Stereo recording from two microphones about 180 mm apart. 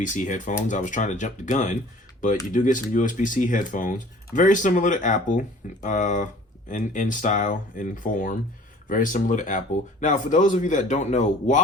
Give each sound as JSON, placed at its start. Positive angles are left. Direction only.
{"t": 0.0, "sound": "speech", "side_deg": 45}